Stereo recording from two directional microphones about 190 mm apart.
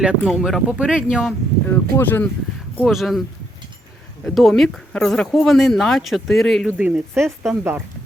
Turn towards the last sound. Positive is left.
turn(degrees=0)  # may be behind; listen again after turning